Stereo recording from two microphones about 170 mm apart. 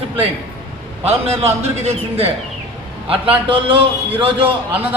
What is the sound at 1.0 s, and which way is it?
A man's voice, 40° right (ahead or behind).